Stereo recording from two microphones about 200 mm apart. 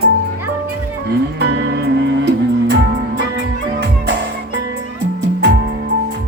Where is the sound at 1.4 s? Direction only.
55° right (ahead or behind).